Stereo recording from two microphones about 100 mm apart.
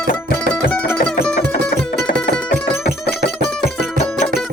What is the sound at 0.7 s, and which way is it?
Music, 15° left (ahead or behind).